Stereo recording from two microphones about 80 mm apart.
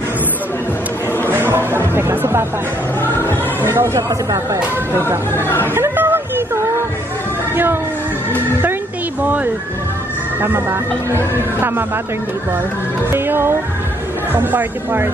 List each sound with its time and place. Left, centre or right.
1.3 s a sound: right
2.0 s music: right
3.0 s music: left
3.6 s speech: right
4.1 s speech: right
4.9 s speech: right
5.3 s speech: left
5.8 s a sound: right
7.5 s speech: right
10.4 s speech: right
13.1 s speech: right